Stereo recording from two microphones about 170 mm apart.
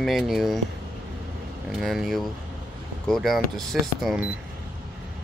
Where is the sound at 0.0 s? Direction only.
Centre (ahead or behind).